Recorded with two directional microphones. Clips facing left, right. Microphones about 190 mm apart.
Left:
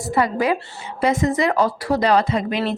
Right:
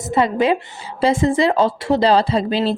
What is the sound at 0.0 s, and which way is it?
Speech, 20° right (ahead or behind).